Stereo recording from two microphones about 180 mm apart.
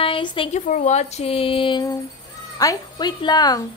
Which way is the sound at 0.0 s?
30° left (ahead or behind).